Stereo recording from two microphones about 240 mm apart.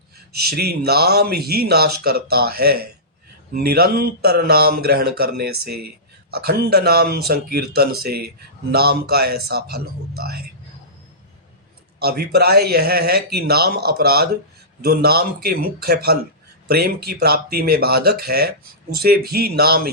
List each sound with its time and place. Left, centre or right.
0.5 s speech: right
11.9 s speech: right